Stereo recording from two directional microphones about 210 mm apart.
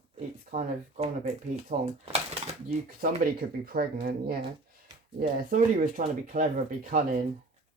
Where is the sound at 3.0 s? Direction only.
45° right (ahead or behind).